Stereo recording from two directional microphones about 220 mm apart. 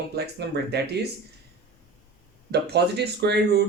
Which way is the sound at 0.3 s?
50° right (ahead or behind).